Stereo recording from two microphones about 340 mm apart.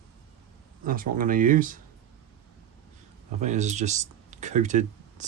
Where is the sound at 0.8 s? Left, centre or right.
Right.